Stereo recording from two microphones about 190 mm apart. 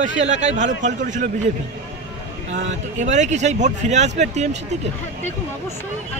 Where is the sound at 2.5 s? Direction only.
40° right (ahead or behind).